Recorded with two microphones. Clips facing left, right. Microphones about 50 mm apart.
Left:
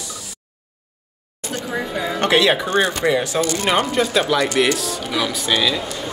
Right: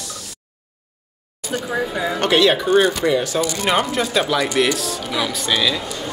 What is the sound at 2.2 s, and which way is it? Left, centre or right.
Speech, centre.